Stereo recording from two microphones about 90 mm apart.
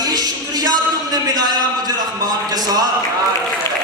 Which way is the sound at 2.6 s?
45° right (ahead or behind).